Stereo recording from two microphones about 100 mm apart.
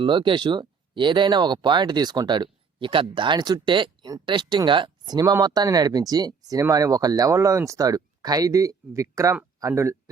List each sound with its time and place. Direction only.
0.0 s speech: 55° right (ahead or behind); by 10.0 s 30° right (ahead or behind)